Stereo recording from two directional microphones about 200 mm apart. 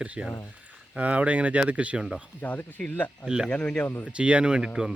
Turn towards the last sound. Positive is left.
turn(degrees=-5)  # may be behind; listen again after turning